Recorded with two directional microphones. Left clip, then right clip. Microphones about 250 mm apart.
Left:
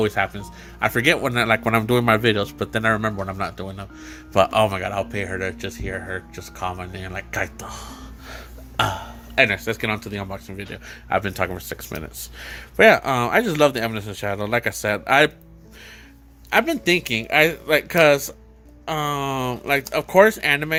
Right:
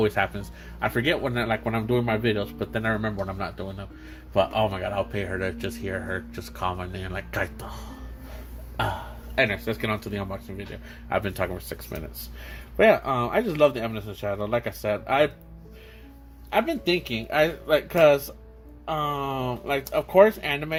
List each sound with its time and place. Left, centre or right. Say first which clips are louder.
0.0 s speech: left 2 dB; centre
9.3 s speech: left 5 dB; centre
16.5 s speech: left 5 dB; left